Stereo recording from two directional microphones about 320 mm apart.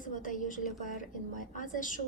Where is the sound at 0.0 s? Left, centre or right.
Left.